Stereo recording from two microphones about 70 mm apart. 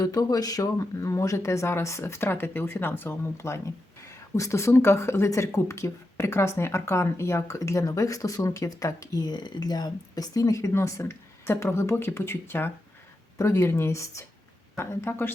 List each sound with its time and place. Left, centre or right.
0.0 s speech: left
9.2 s speech: left
13.4 s speech: left
14.8 s speech: left